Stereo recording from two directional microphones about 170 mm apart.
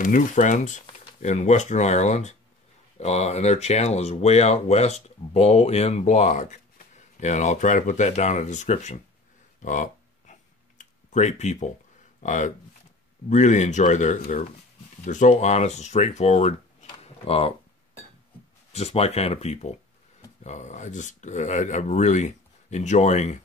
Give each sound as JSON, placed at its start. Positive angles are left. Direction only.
{"t": 0.0, "sound": "speech", "side_deg": 50}
{"t": 9.6, "sound": "a sound", "side_deg": 45}
{"t": 12.2, "sound": "speech", "side_deg": 45}
{"t": 18.7, "sound": "speech", "side_deg": 40}